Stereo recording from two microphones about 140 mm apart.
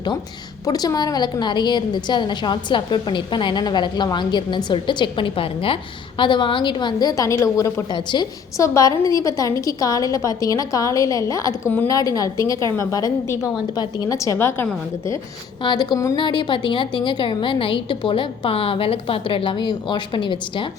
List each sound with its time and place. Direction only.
0.6 s a woman's voice: 25° left (ahead or behind)
15.6 s a woman's voice: 30° left (ahead or behind)